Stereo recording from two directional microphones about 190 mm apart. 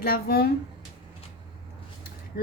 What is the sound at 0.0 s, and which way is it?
Speech, 55° left (ahead or behind).